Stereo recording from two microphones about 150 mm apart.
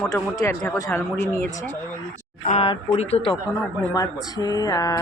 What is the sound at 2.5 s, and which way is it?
Speech, 40° left (ahead or behind).